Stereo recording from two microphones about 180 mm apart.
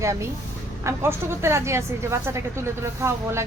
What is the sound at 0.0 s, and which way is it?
A woman's voice, 15° right (ahead or behind).